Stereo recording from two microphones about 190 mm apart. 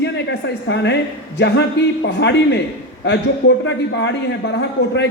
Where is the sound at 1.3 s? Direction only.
60° left (ahead or behind).